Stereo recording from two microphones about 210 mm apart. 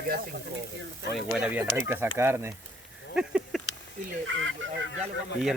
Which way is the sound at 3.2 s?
5° right (ahead or behind).